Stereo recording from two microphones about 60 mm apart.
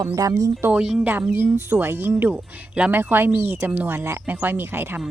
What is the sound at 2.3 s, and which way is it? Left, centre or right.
Speech, right.